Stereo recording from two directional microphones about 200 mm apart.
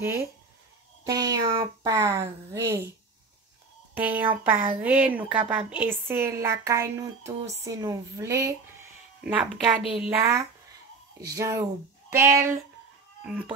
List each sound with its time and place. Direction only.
0.0 s speech: 15° right (ahead or behind)
3.9 s a woman's voice: 10° right (ahead or behind)
11.1 s speech: 15° right (ahead or behind)